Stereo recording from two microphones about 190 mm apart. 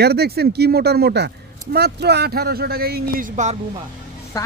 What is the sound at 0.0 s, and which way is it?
Speech, 55° right (ahead or behind).